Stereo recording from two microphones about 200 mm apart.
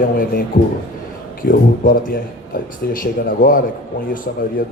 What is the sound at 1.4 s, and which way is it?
A man's voice, 45° left (ahead or behind).